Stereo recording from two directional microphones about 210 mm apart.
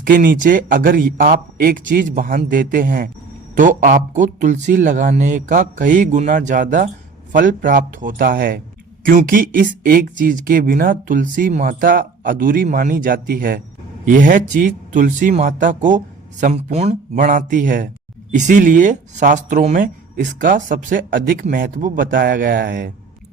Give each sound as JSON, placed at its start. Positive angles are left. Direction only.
{"t": 0.0, "sound": "speech", "side_deg": -40}